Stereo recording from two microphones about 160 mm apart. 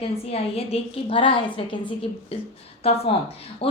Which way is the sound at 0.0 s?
40° left (ahead or behind).